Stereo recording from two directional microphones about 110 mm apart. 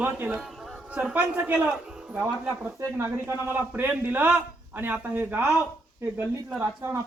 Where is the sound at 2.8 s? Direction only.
25° right (ahead or behind).